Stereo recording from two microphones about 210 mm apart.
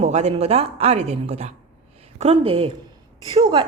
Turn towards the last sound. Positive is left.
turn(degrees=-25)  # may be behind; listen again after turning